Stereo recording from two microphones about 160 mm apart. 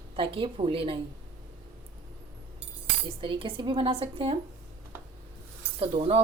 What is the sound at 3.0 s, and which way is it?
A woman's voice, 35° right (ahead or behind).